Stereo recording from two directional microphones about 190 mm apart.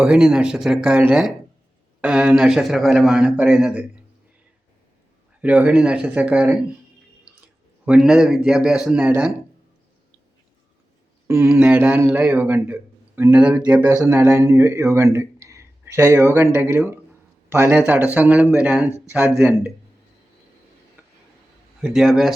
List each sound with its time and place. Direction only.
0.0 s a man's voice: 5° right (ahead or behind)
5.4 s a man's voice: 5° right (ahead or behind)
11.3 s a man's voice: 5° right (ahead or behind)
21.8 s a man's voice: 5° right (ahead or behind)